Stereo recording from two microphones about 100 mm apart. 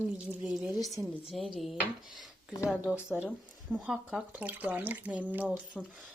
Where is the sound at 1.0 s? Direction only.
30° right (ahead or behind).